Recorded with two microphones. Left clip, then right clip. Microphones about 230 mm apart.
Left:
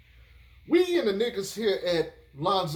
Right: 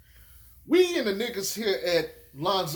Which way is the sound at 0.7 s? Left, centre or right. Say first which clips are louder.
Right 1 dB; right.